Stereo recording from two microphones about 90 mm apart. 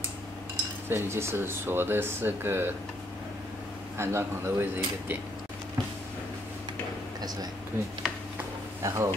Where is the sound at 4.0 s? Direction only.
30° right (ahead or behind).